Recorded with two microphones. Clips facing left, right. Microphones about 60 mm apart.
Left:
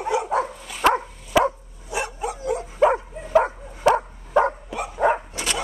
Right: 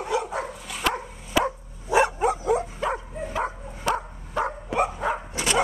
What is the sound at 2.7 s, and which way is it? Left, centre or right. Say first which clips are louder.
Dog: left 9 dB; left.